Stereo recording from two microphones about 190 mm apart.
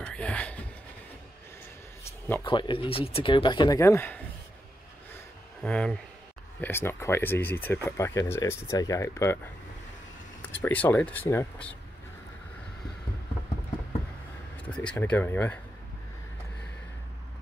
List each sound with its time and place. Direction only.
0.0 s speech: 5° left (ahead or behind)
2.4 s speech: 25° left (ahead or behind)
5.1 s a sound: 5° left (ahead or behind)
6.6 s speech: 10° left (ahead or behind)
10.4 s speech: 10° left (ahead or behind)
14.6 s speech: 5° left (ahead or behind)